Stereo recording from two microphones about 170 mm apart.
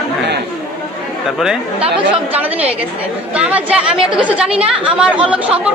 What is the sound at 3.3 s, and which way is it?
Speech, 5° right (ahead or behind).